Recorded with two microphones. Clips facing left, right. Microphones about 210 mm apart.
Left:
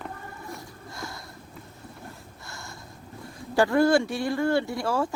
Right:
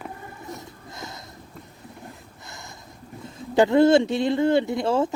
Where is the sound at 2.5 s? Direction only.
20° right (ahead or behind).